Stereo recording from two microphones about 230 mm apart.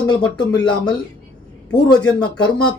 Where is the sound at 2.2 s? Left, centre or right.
Centre.